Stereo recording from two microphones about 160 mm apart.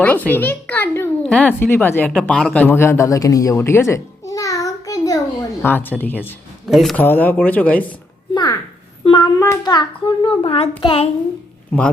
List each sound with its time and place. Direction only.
0.0 s a child's voice: 10° left (ahead or behind)
6.7 s speech: centre (ahead or behind)
7.0 s a child's voice: 10° left (ahead or behind)
7.9 s a sound: 25° left (ahead or behind)
9.0 s a child's voice: 25° left (ahead or behind)